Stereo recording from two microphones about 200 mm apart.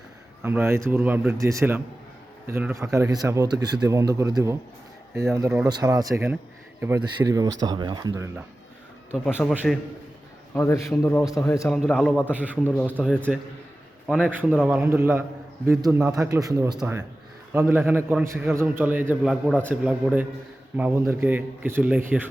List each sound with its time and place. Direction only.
0.4 s speech: 10° right (ahead or behind)
9.1 s a man's voice: centre (ahead or behind)
10.5 s speech: 10° left (ahead or behind)
11.7 s a man's voice: centre (ahead or behind)
12.3 s speech: 5° right (ahead or behind)
12.6 s a man's voice: 5° left (ahead or behind); by 22.3 s 10° right (ahead or behind)